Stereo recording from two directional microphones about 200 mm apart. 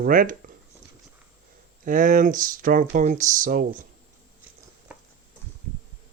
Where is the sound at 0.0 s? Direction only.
40° right (ahead or behind).